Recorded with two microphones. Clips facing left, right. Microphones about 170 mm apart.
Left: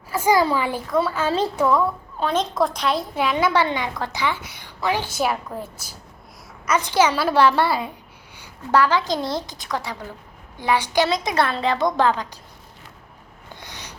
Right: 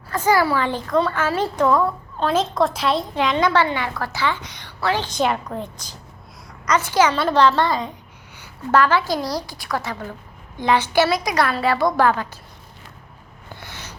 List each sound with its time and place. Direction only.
0.1 s a woman's voice: 10° left (ahead or behind)
1.2 s a woman's voice: 15° left (ahead or behind)
13.5 s snort: 15° left (ahead or behind)